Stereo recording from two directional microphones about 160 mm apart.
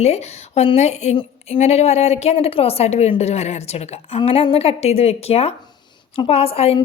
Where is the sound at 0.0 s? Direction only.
45° left (ahead or behind).